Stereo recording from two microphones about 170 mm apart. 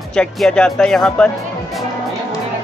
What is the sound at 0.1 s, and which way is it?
Speech, 5° left (ahead or behind).